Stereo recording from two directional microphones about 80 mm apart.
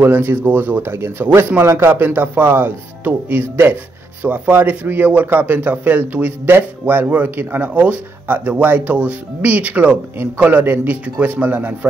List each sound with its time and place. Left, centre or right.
0.0 s a man's voice: right